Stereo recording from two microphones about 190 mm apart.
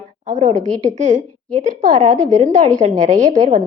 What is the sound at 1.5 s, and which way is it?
A woman's voice, 30° right (ahead or behind).